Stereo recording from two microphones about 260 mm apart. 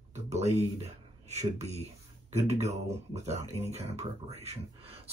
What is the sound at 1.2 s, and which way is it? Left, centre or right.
Speech, right.